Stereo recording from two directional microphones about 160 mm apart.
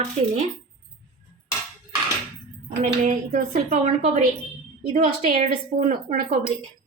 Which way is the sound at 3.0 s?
55° right (ahead or behind).